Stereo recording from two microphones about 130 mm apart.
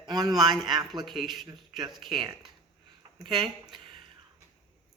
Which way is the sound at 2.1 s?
35° right (ahead or behind).